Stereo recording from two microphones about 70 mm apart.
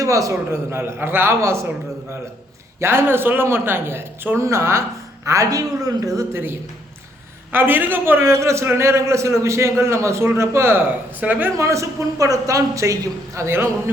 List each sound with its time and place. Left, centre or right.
0.0 s a man's voice: right
0.5 s a man's voice: right
2.8 s a man's voice: right
6.3 s a man's voice: right
11.5 s a man's voice: right